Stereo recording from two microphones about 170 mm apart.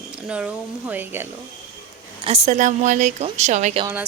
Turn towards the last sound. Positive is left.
turn(degrees=-45)  # may be behind; listen again after turning